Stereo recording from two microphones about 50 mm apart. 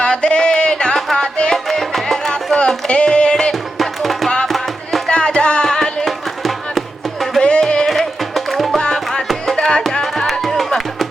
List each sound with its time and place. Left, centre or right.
0.0 s a sound: centre
1.1 s music: centre
1.5 s music: centre
2.3 s music: centre
3.8 s music: centre
5.0 s music: centre
8.8 s music: centre